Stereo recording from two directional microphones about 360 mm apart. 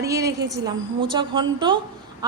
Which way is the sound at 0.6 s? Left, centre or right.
Centre.